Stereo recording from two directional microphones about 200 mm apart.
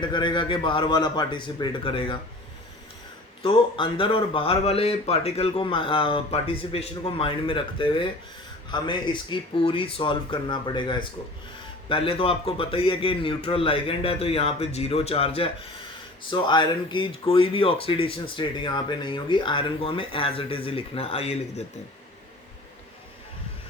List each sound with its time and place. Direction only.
0.0 s speech: 20° left (ahead or behind)
3.4 s speech: 25° left (ahead or behind)